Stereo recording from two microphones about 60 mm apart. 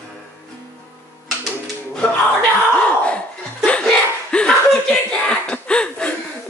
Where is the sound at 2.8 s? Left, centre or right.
Left.